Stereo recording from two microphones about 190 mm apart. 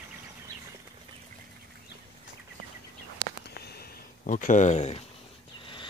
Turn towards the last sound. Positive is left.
turn(degrees=35)  # may be behind; listen again after turning